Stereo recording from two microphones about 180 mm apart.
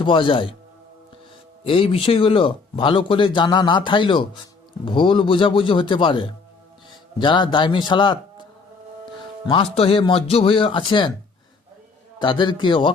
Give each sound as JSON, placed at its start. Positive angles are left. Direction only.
{"t": 0.0, "sound": "speech", "side_deg": 30}
{"t": 1.6, "sound": "speech", "side_deg": 30}
{"t": 9.5, "sound": "speech", "side_deg": 30}
{"t": 12.2, "sound": "speech", "side_deg": 25}